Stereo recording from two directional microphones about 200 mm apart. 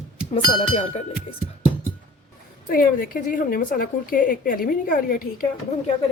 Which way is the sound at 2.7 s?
45° left (ahead or behind).